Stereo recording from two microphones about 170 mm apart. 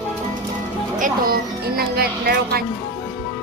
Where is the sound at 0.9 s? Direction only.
55° right (ahead or behind).